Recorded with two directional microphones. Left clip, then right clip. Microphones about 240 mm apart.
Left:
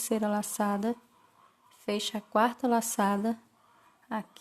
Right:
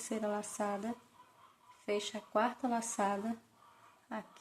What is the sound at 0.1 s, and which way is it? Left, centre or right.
Speech, left.